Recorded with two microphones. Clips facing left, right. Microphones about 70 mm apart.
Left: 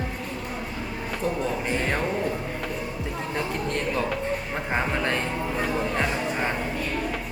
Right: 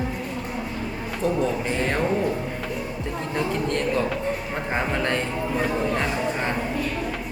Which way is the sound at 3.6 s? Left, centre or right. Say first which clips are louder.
Right 3 dB; centre.